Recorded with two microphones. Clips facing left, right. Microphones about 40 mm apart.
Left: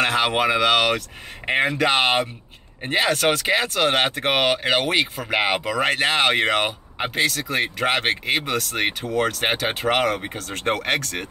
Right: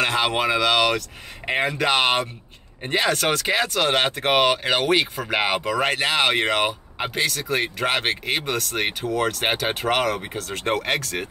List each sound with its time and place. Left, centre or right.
0.0 s speech: centre